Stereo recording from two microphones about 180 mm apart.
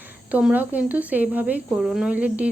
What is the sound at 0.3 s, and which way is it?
Speech, 10° right (ahead or behind).